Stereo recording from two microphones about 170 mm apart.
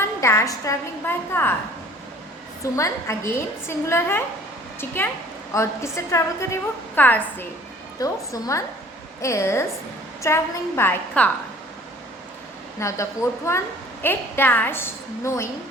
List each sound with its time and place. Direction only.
0.0 s a woman's voice: 15° left (ahead or behind)
2.7 s a woman's voice: 15° left (ahead or behind)
5.5 s a woman's voice: 15° left (ahead or behind)
12.8 s a woman's voice: 15° left (ahead or behind)